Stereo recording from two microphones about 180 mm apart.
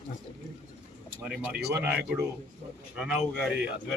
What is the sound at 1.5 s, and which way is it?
Speech, 65° right (ahead or behind).